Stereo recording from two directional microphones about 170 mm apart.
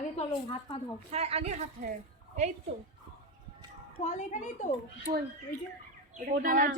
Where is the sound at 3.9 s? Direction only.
45° left (ahead or behind).